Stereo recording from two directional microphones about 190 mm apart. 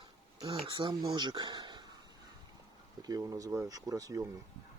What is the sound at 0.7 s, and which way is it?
Speech, 25° right (ahead or behind).